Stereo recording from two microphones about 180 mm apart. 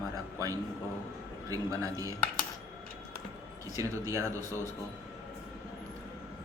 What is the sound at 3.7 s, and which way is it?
Speech, 15° right (ahead or behind).